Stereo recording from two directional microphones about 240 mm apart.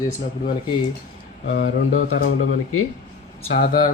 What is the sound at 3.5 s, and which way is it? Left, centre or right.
Speech, left.